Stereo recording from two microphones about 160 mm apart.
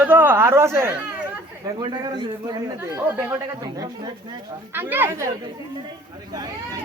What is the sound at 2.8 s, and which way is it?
Speech, 15° right (ahead or behind).